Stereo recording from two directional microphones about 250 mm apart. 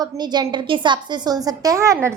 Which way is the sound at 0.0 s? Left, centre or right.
Centre.